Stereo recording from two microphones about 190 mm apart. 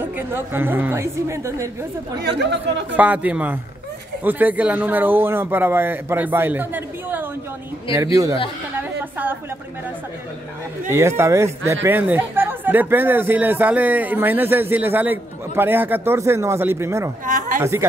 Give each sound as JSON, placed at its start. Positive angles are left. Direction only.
{"t": 0.0, "sound": "speech", "side_deg": -10}
{"t": 2.2, "sound": "speech", "side_deg": -65}
{"t": 3.0, "sound": "speech", "side_deg": -10}
{"t": 8.7, "sound": "a sound", "side_deg": -10}
{"t": 10.9, "sound": "speech", "side_deg": -15}
{"t": 17.3, "sound": "a sound", "side_deg": -40}
{"t": 17.6, "sound": "speech", "side_deg": -15}